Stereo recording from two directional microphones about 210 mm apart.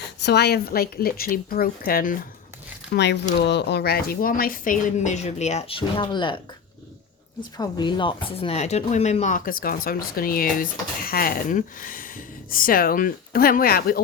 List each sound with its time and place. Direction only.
0.2 s a woman's voice: 50° left (ahead or behind)
2.9 s a woman's voice: 55° left (ahead or behind); by 6.4 s 25° left (ahead or behind)
7.5 s speech: 20° left (ahead or behind); by 14.0 s 45° left (ahead or behind)